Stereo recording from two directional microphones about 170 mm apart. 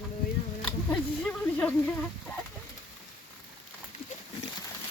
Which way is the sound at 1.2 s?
5° left (ahead or behind).